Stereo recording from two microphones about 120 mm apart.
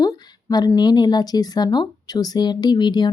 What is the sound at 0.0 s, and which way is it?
Speech, 35° left (ahead or behind).